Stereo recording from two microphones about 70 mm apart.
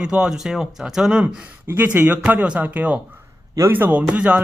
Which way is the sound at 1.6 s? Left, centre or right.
Right.